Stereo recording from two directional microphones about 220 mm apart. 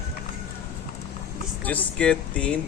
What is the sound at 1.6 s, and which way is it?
Speech, 5° left (ahead or behind).